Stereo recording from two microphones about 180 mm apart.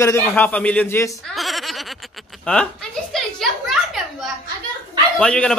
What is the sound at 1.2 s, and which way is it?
Giggle, centre (ahead or behind).